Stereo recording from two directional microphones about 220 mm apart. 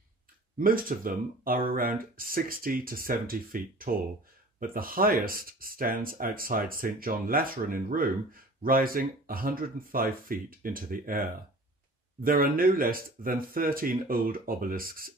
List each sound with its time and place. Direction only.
0.6 s speech: 40° right (ahead or behind)